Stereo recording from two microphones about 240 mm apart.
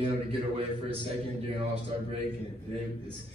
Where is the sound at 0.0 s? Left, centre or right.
Right.